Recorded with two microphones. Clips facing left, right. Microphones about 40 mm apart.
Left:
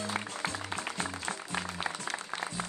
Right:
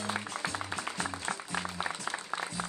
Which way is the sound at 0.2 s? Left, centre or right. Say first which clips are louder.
Left 1 dB; centre.